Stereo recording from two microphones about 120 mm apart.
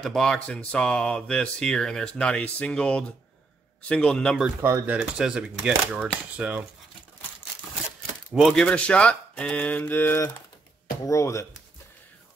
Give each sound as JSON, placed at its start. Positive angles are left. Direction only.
{"t": 0.0, "sound": "speech", "side_deg": 5}
{"t": 4.6, "sound": "speech", "side_deg": -20}
{"t": 4.9, "sound": "speech", "side_deg": -5}
{"t": 8.3, "sound": "speech", "side_deg": 0}